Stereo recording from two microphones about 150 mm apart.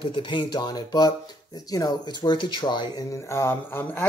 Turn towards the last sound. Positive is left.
turn(degrees=15)  # may be behind; listen again after turning